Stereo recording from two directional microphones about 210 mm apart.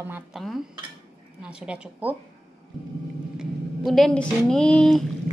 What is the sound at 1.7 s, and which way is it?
Speech, 5° right (ahead or behind).